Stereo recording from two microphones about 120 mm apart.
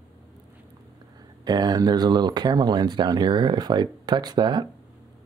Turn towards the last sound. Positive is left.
turn(degrees=-35)  # may be behind; listen again after turning